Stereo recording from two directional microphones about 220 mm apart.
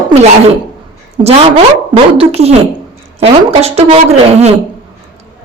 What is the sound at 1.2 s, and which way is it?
Speech, 30° right (ahead or behind).